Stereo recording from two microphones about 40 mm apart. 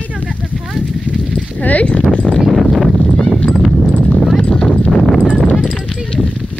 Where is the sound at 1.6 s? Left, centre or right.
Left.